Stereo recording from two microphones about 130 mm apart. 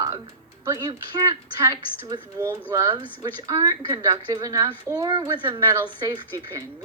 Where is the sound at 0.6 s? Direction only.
25° right (ahead or behind).